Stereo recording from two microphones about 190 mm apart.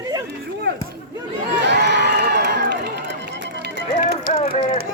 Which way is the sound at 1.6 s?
65° right (ahead or behind).